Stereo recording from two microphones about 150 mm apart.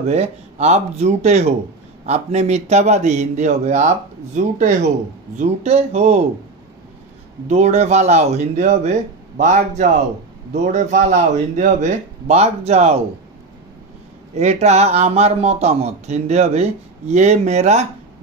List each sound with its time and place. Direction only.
0.1 s a man's voice: 45° right (ahead or behind)
7.4 s a man's voice: 45° right (ahead or behind)
14.3 s a man's voice: 50° right (ahead or behind)